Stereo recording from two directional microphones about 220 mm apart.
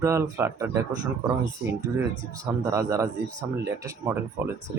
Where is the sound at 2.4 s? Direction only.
15° right (ahead or behind).